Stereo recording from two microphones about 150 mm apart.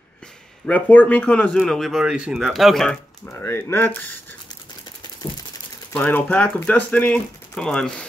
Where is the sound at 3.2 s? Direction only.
15° left (ahead or behind).